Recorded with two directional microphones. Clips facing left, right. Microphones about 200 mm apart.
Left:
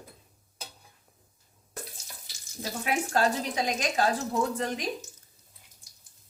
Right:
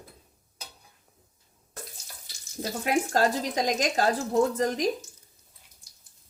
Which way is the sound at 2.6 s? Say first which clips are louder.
Right 4 dB; 40° right (ahead or behind).